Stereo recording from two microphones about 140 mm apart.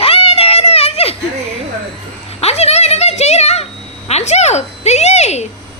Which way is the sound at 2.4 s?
50° left (ahead or behind).